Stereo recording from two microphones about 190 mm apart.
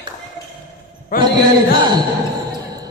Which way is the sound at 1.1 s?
50° left (ahead or behind).